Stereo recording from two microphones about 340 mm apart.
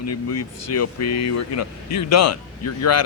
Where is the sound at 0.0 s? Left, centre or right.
Left.